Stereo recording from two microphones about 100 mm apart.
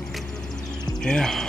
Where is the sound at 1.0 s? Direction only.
5° left (ahead or behind).